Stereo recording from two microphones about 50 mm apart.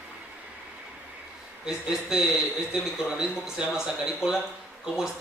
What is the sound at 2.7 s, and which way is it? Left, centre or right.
A man's voice, centre.